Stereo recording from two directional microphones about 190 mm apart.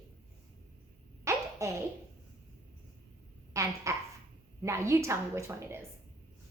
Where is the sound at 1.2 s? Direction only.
15° right (ahead or behind).